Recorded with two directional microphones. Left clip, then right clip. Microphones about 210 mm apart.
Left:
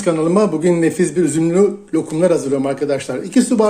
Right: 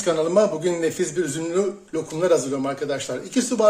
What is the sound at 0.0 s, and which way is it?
Speech, 30° left (ahead or behind).